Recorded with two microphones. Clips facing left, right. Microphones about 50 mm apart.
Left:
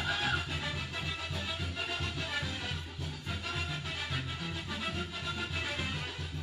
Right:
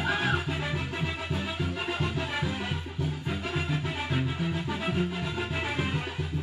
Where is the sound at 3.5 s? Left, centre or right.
Right.